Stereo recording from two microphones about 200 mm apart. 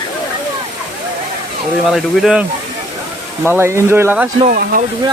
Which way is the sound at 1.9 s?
Centre (ahead or behind).